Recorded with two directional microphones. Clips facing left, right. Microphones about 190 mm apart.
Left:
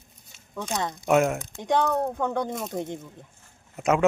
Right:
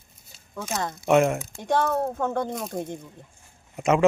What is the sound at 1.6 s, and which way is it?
Speech, 20° left (ahead or behind).